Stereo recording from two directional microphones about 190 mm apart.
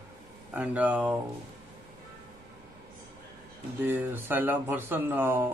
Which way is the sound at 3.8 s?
10° right (ahead or behind).